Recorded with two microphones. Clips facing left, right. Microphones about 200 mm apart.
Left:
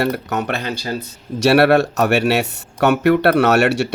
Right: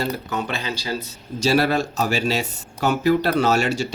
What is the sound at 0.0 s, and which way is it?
Speech, 65° left (ahead or behind).